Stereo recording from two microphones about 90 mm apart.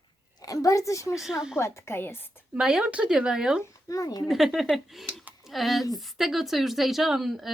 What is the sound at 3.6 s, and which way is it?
Speech, 40° left (ahead or behind).